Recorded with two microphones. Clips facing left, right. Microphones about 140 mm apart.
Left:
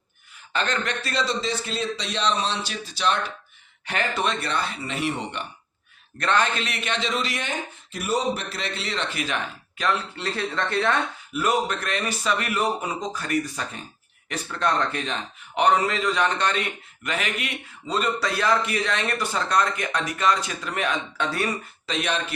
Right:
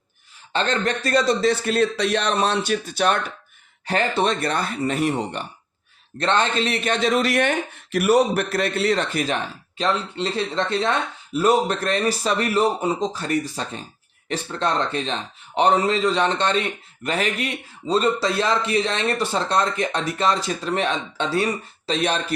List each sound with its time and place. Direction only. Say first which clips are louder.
0.5 s a man's voice: right 4 dB; 30° right (ahead or behind); by 3.3 s 55° right (ahead or behind)
3.8 s speech: right 5 dB; 35° right (ahead or behind)
6.1 s speech: right 3 dB; 25° right (ahead or behind)